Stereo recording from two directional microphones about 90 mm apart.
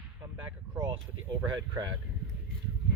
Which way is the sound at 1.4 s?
45° right (ahead or behind).